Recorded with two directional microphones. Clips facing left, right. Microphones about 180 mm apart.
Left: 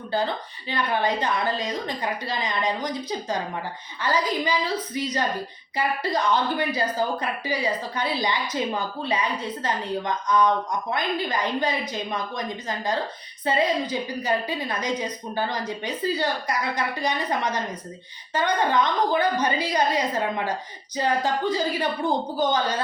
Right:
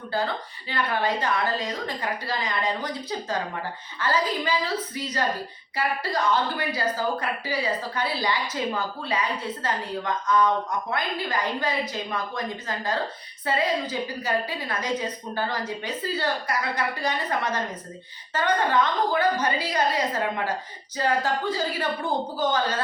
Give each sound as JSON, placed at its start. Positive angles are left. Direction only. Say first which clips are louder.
{"t": 0.7, "sound": "a woman's voice", "louder": "left 1 dB", "side_deg": 20}